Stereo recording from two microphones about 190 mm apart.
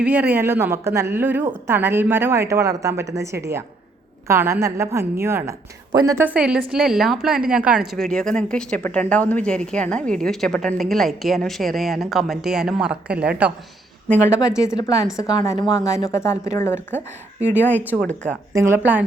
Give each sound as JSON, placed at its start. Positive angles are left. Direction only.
{"t": 0.0, "sound": "a woman's voice", "side_deg": -10}
{"t": 14.6, "sound": "a woman's voice", "side_deg": 20}
{"t": 17.7, "sound": "a woman's voice", "side_deg": -10}
{"t": 18.0, "sound": "a woman's voice", "side_deg": 5}
{"t": 18.5, "sound": "a woman's voice", "side_deg": -15}